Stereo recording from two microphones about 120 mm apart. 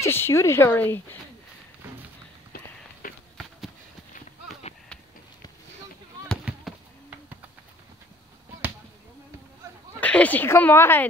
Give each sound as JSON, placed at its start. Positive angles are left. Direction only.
{"t": 0.0, "sound": "speech", "side_deg": 20}
{"t": 6.4, "sound": "fireworks", "side_deg": -10}
{"t": 9.9, "sound": "a woman's voice", "side_deg": 10}